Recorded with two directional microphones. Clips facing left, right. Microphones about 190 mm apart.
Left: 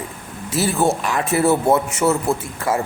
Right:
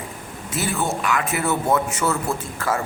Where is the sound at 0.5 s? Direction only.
35° left (ahead or behind).